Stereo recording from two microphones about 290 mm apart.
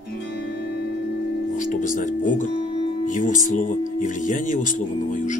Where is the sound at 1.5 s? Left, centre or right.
Left.